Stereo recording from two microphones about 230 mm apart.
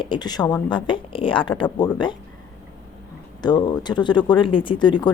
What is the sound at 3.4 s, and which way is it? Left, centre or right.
A woman's voice, centre.